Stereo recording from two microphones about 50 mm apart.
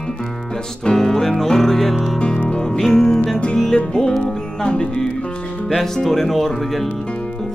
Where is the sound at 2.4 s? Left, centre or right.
Centre.